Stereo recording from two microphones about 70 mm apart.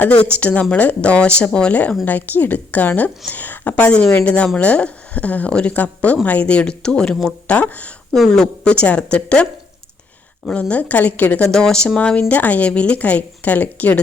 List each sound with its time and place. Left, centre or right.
0.0 s a woman's voice: left
8.1 s speech: centre
10.5 s a woman's voice: centre
11.4 s a woman's voice: centre